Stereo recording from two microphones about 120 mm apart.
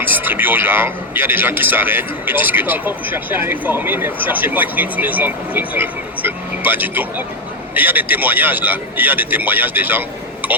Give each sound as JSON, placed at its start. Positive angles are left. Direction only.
{"t": 0.0, "sound": "a man's voice", "side_deg": -15}